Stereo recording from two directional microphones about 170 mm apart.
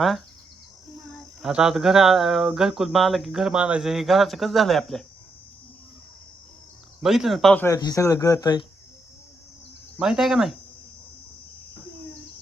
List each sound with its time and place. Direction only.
1.1 s speech: 5° right (ahead or behind)
7.0 s speech: centre (ahead or behind)
7.6 s speech: 20° left (ahead or behind)
10.0 s speech: centre (ahead or behind)